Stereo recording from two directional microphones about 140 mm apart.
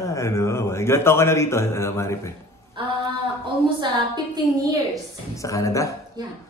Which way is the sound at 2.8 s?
35° right (ahead or behind).